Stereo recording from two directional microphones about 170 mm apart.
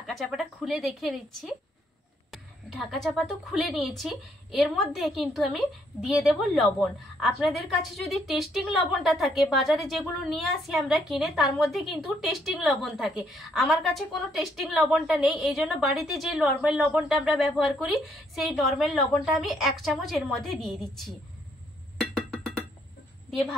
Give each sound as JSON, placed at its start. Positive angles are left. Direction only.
{"t": 0.0, "sound": "a woman's voice", "side_deg": 0}